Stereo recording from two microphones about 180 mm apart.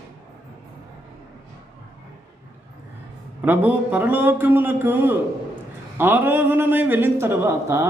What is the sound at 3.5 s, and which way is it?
Speech, 10° right (ahead or behind).